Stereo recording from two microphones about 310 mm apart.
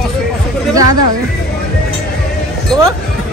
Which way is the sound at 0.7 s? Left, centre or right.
Right.